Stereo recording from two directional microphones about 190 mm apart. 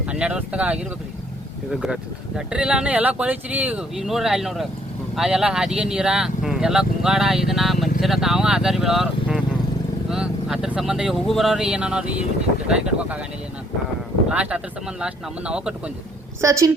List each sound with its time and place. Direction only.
0.0 s speech: 5° right (ahead or behind)
14.3 s speech: 5° right (ahead or behind)
16.4 s a woman's voice: 15° right (ahead or behind)